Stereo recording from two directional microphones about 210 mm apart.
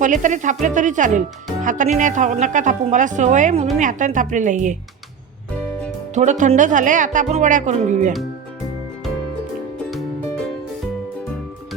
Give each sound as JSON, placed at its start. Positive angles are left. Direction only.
{"t": 0.0, "sound": "a woman's voice", "side_deg": -35}
{"t": 6.1, "sound": "a woman's voice", "side_deg": -35}